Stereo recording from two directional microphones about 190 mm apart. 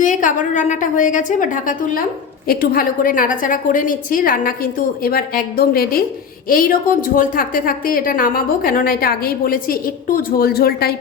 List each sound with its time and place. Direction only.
0.0 s a woman's voice: 40° left (ahead or behind)